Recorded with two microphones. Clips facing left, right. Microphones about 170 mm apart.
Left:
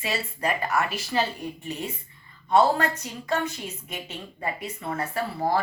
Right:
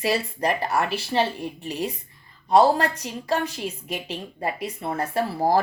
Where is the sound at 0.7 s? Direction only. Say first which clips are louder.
Right 2 dB; 30° right (ahead or behind).